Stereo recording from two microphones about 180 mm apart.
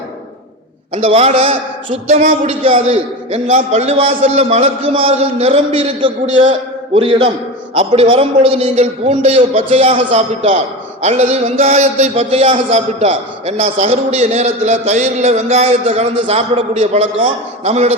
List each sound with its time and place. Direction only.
0.9 s a man's voice: 35° right (ahead or behind)